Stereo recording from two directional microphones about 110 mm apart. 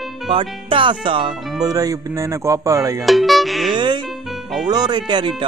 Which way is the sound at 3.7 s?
45° right (ahead or behind).